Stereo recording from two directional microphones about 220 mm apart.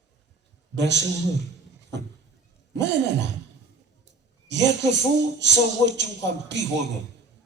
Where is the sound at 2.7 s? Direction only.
50° right (ahead or behind).